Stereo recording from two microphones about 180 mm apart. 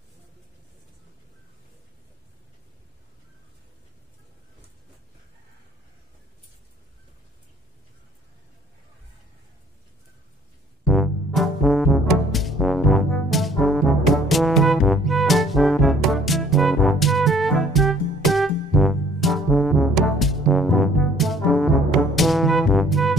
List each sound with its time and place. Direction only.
10.9 s music: centre (ahead or behind)